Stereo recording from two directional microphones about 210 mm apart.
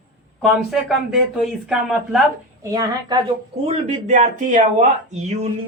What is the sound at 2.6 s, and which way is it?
Speech, 15° right (ahead or behind).